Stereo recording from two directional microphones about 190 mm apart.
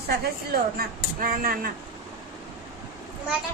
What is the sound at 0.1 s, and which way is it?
Speech, 55° right (ahead or behind).